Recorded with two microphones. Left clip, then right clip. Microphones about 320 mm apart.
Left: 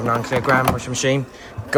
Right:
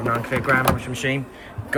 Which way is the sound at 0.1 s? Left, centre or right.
Centre.